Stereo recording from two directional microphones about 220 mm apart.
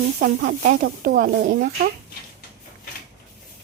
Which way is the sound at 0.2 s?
40° right (ahead or behind).